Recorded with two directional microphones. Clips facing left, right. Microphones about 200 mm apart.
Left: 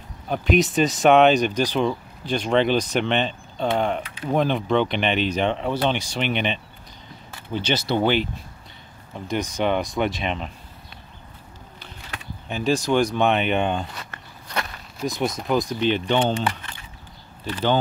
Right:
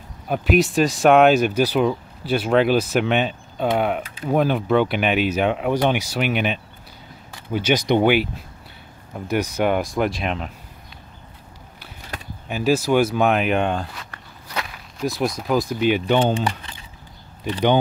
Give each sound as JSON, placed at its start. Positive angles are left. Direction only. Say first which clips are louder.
{"t": 0.3, "sound": "speech", "louder": "right 2 dB", "side_deg": 0}
{"t": 12.4, "sound": "speech", "louder": "right 3 dB", "side_deg": -5}
{"t": 17.5, "sound": "speech", "louder": "right 4 dB", "side_deg": -15}